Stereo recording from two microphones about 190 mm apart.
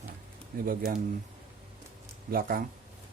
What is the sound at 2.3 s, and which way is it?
Speech, 50° right (ahead or behind).